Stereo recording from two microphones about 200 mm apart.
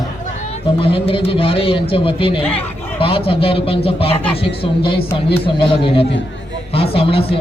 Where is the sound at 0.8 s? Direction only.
25° left (ahead or behind).